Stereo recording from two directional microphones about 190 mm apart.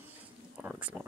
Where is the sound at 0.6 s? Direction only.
10° right (ahead or behind).